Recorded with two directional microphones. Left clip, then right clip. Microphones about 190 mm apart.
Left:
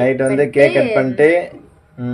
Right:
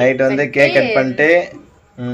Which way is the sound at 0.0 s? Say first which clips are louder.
Right 1 dB; centre (ahead or behind).